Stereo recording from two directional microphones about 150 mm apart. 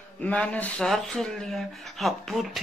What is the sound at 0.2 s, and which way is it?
Speech, 10° left (ahead or behind).